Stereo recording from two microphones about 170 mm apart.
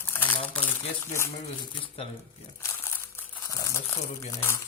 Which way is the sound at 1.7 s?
30° left (ahead or behind).